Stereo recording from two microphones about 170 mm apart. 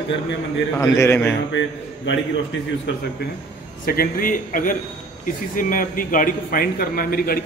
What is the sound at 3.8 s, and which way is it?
A man's voice, 60° left (ahead or behind).